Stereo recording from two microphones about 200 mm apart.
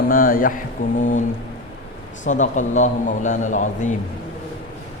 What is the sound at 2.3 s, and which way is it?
A man's voice, 40° left (ahead or behind).